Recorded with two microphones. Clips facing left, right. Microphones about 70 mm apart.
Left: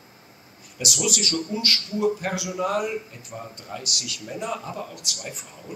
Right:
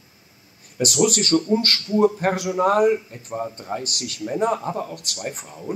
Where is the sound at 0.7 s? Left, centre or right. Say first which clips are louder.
Right 8 dB; right.